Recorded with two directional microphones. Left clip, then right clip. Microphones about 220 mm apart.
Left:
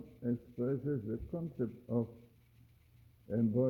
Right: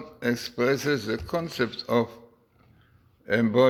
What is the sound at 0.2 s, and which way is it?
A man's voice, 15° right (ahead or behind).